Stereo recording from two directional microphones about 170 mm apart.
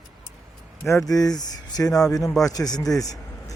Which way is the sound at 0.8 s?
20° left (ahead or behind).